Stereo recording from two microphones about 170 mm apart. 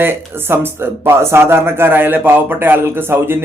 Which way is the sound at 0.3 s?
15° right (ahead or behind).